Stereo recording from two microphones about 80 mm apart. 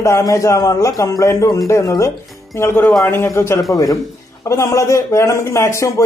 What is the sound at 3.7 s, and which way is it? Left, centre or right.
Speech, left.